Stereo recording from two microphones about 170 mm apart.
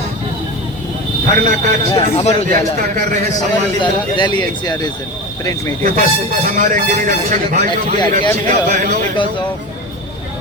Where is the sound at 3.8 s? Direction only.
25° left (ahead or behind).